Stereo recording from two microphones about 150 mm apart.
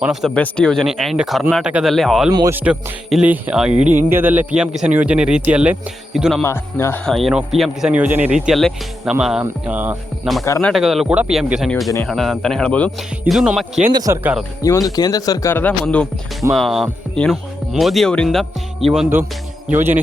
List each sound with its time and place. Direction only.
0.0 s speech: centre (ahead or behind)
2.5 s speech: 10° right (ahead or behind)
6.4 s speech: 20° left (ahead or behind)
7.0 s speech: centre (ahead or behind)
10.6 s speech: centre (ahead or behind)
13.9 s speech: 25° right (ahead or behind)
14.6 s speech: 25° left (ahead or behind); by 19.0 s centre (ahead or behind)
19.7 s speech: 15° right (ahead or behind)